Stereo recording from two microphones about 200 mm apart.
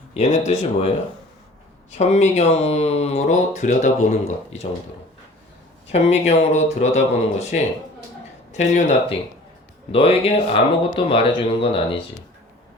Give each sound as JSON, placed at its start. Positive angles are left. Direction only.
{"t": 0.1, "sound": "speech", "side_deg": 35}
{"t": 1.9, "sound": "speech", "side_deg": 35}
{"t": 5.9, "sound": "speech", "side_deg": 35}